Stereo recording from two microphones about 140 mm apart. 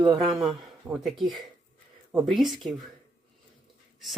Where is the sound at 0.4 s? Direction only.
5° right (ahead or behind).